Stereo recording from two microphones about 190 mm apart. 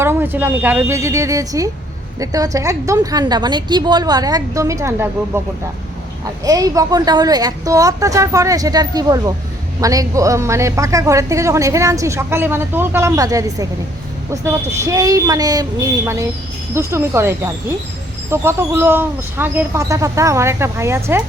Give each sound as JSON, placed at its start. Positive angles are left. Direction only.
{"t": 0.0, "sound": "a woman's voice", "side_deg": -10}
{"t": 14.8, "sound": "speech", "side_deg": -20}